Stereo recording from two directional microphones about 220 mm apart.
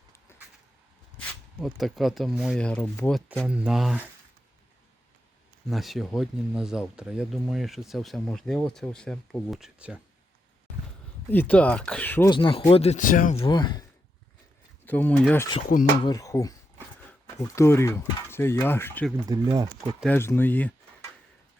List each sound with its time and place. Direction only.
0.3 s vehicle: 10° left (ahead or behind)
1.6 s speech: centre (ahead or behind)
3.2 s speech: centre (ahead or behind)
5.6 s speech: centre (ahead or behind)
11.3 s speech: 5° left (ahead or behind)
12.3 s speech: 25° left (ahead or behind)
14.8 s speech: 10° left (ahead or behind)
15.7 s speech: 40° left (ahead or behind)
16.0 s speech: 15° left (ahead or behind)
19.3 s speech: 15° right (ahead or behind)
20.0 s speech: 10° left (ahead or behind)